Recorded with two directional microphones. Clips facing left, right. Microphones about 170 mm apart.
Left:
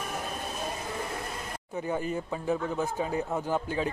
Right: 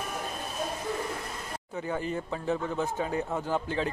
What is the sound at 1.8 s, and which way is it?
Speech, 15° left (ahead or behind).